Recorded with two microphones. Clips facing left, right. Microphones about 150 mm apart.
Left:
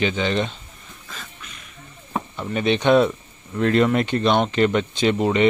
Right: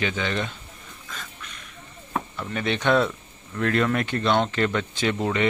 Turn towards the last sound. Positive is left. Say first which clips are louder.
# left 5 dB
turn(degrees=20)  # may be behind; listen again after turning